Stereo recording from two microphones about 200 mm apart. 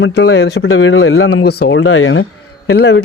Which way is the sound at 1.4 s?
55° left (ahead or behind).